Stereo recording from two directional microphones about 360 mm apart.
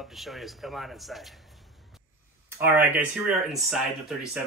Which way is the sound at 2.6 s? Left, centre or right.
Centre.